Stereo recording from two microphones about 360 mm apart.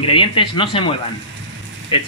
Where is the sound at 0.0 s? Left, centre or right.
Centre.